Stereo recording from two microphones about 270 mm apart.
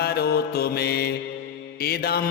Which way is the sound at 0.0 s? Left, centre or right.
Left.